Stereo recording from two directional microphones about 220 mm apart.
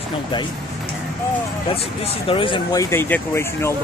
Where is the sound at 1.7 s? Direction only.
25° left (ahead or behind).